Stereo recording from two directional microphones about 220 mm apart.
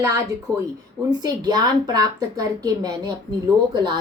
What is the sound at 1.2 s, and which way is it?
A woman's voice, 20° right (ahead or behind).